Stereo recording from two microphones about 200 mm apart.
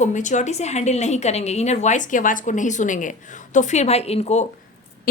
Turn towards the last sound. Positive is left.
turn(degrees=35)  # may be behind; listen again after turning